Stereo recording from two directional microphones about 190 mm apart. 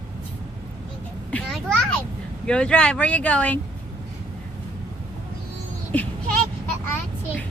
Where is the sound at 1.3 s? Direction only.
5° left (ahead or behind).